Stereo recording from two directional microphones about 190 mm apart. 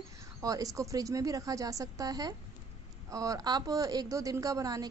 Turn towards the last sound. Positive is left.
turn(degrees=-20)  # may be behind; listen again after turning